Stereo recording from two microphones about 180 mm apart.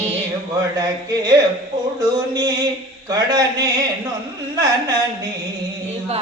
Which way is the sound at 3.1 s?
20° right (ahead or behind).